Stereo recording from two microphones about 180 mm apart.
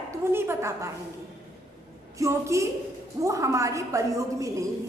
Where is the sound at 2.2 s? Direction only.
15° right (ahead or behind).